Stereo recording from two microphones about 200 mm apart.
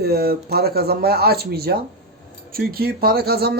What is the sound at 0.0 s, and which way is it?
Speech, 50° right (ahead or behind).